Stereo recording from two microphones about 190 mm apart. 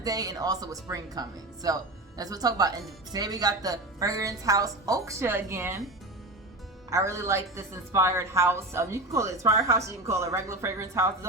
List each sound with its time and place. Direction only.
0.0 s speech: 20° right (ahead or behind)
6.9 s a woman's voice: 15° right (ahead or behind)